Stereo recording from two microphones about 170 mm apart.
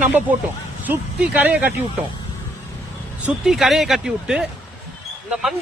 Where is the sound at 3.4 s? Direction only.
Centre (ahead or behind).